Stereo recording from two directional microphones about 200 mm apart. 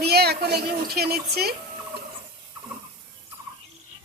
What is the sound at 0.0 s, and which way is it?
A woman's voice, 55° right (ahead or behind).